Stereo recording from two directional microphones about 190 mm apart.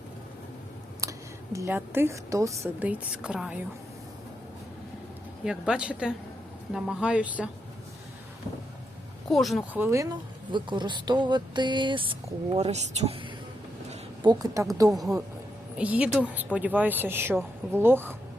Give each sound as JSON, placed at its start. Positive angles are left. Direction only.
{"t": 1.0, "sound": "a sound", "side_deg": -15}
{"t": 1.5, "sound": "a woman's voice", "side_deg": -15}
{"t": 5.5, "sound": "speech", "side_deg": -5}
{"t": 9.3, "sound": "speech", "side_deg": 0}
{"t": 9.8, "sound": "a woman's voice", "side_deg": -15}
{"t": 14.3, "sound": "speech", "side_deg": -20}
{"t": 14.9, "sound": "a woman's voice", "side_deg": 0}